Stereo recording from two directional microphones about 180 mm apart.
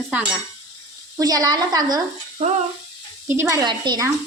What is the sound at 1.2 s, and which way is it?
Speech, 20° right (ahead or behind).